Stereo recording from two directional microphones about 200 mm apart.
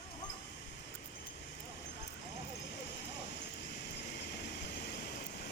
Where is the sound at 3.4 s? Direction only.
60° left (ahead or behind).